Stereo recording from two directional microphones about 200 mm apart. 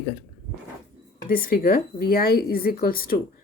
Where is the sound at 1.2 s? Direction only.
45° left (ahead or behind).